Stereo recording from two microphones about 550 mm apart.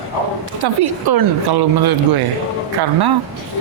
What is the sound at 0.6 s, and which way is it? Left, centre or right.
Speech, right.